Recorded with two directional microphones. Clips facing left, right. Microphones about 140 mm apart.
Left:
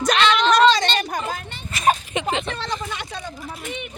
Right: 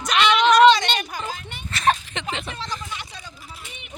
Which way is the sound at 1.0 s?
50° left (ahead or behind).